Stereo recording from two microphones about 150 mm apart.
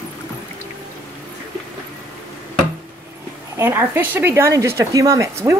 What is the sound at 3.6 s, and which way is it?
A woman's voice, 15° right (ahead or behind).